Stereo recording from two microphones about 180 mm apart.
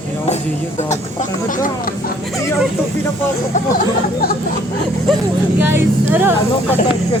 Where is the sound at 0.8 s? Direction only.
40° left (ahead or behind).